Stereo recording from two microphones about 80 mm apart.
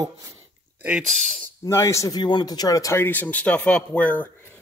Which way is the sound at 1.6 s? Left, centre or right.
Left.